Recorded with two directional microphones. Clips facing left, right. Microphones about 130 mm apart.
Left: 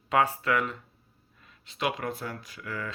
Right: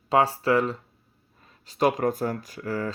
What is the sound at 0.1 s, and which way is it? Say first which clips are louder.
Speech: right 4 dB; 30° right (ahead or behind).